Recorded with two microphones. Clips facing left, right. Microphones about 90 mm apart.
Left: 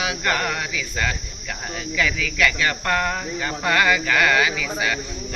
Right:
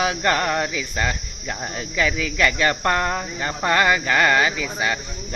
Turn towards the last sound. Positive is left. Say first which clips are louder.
# right 1 dB
turn(degrees=-30)  # may be behind; listen again after turning